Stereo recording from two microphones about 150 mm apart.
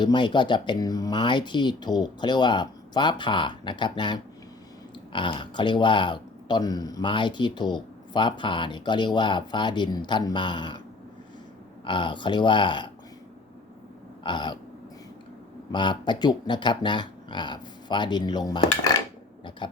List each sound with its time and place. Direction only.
0.0 s speech: 30° left (ahead or behind)
11.9 s speech: 35° left (ahead or behind)
14.3 s speech: 30° left (ahead or behind)
15.7 s speech: 30° left (ahead or behind)